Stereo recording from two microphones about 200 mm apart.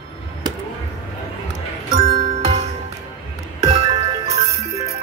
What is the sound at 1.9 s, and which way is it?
Music, 30° right (ahead or behind).